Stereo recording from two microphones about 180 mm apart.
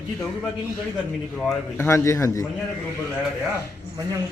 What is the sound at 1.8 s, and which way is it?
Speech, 15° left (ahead or behind).